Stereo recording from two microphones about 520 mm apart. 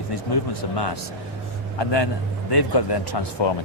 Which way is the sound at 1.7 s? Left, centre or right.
Left.